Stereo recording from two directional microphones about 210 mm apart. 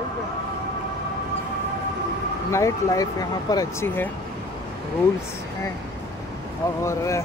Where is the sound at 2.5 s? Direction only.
15° left (ahead or behind).